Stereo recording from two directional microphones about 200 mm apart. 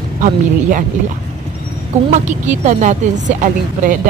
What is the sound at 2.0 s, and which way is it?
Speech, 35° right (ahead or behind).